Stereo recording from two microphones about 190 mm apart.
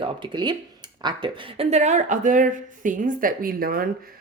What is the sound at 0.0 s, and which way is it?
Speech, 25° right (ahead or behind).